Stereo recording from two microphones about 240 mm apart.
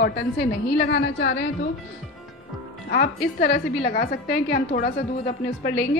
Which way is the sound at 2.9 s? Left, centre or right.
Left.